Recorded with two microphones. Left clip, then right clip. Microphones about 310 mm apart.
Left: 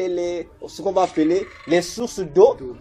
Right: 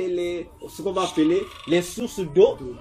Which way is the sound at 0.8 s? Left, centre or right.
Left.